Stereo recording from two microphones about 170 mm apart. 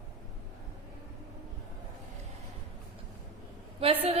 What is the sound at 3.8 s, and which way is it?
Speech, 35° right (ahead or behind).